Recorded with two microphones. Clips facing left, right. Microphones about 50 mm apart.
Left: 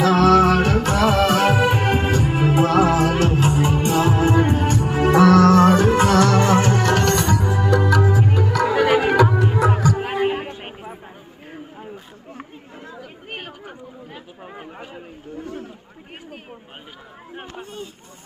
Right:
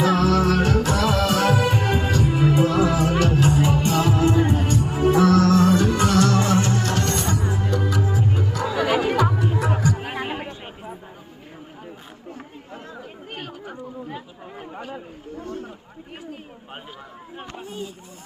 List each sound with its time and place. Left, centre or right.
0.0 s music: left
3.5 s music: centre
4.0 s music: left
5.0 s music: left
5.3 s music: left
7.7 s music: left
8.6 s music: left
10.0 s music: centre